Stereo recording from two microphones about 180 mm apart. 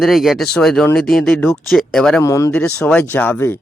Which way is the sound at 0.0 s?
Centre (ahead or behind).